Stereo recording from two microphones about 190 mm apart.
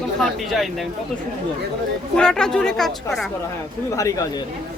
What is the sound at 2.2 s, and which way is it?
Speech, 5° left (ahead or behind).